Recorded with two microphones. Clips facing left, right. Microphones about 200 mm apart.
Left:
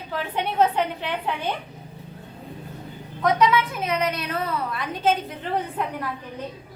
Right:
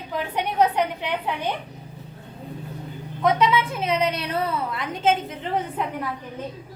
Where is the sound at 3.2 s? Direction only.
25° right (ahead or behind).